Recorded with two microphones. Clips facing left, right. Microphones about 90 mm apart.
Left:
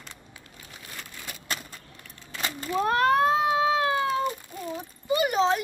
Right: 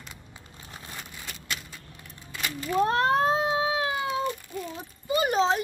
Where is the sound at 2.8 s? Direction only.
30° right (ahead or behind).